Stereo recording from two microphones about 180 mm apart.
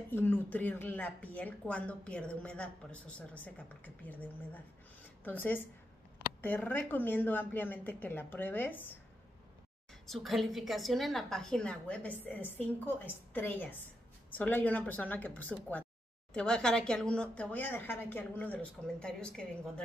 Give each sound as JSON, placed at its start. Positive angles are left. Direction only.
{"t": 0.1, "sound": "speech", "side_deg": 10}
{"t": 10.0, "sound": "speech", "side_deg": 0}